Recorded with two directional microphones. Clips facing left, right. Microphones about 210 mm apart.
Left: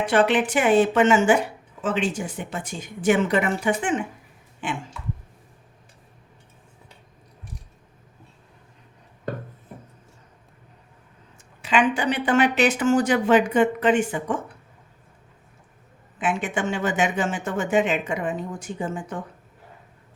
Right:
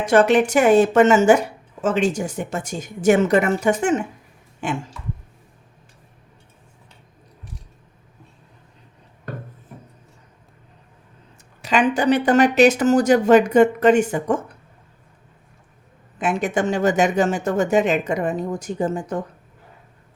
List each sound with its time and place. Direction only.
0.0 s speech: 45° right (ahead or behind)
11.6 s speech: 40° right (ahead or behind)
16.1 s speech: 40° right (ahead or behind)